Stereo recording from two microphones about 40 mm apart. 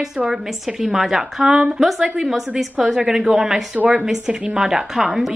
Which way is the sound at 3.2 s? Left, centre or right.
Centre.